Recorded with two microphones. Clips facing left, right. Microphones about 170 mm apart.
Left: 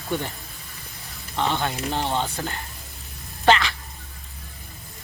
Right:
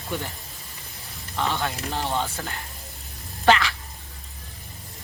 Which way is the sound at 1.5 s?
Centre (ahead or behind).